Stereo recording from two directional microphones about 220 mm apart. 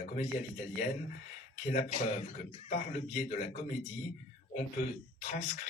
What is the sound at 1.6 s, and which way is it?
A man's voice, 35° left (ahead or behind).